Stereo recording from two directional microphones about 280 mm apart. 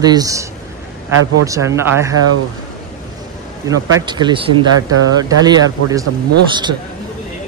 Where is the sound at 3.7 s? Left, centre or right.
Centre.